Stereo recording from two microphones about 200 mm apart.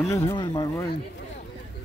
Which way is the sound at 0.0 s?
15° left (ahead or behind).